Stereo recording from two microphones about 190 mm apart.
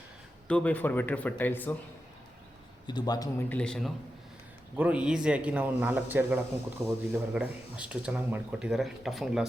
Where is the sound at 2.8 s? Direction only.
25° left (ahead or behind).